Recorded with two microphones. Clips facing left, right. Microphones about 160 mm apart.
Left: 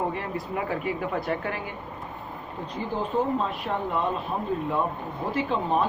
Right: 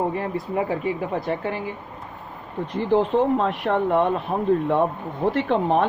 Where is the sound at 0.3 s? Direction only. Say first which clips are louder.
Right 5 dB; 25° right (ahead or behind).